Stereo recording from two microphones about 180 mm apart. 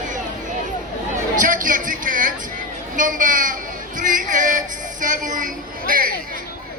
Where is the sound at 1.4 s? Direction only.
50° right (ahead or behind).